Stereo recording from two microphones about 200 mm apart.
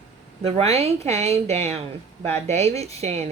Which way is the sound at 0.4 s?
30° right (ahead or behind).